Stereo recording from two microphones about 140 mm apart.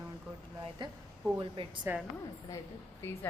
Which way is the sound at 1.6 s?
40° right (ahead or behind).